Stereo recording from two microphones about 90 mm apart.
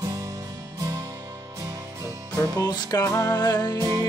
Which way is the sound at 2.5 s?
45° left (ahead or behind).